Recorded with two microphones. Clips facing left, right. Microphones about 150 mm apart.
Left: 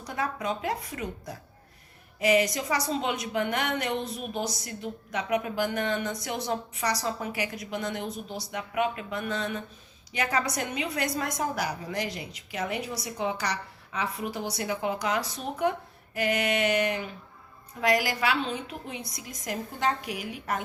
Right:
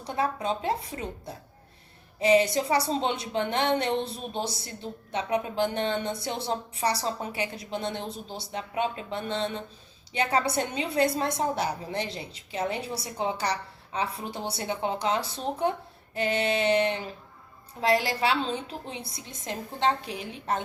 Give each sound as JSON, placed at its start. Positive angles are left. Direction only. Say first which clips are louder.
{"t": 0.0, "sound": "a woman's voice", "louder": "right 3 dB", "side_deg": -30}